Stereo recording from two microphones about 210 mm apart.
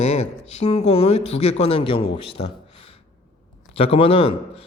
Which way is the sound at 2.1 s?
25° left (ahead or behind).